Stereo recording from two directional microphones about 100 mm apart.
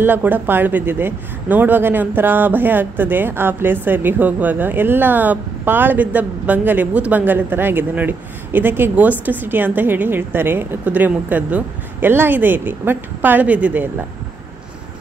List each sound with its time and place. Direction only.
0.0 s speech: 20° right (ahead or behind)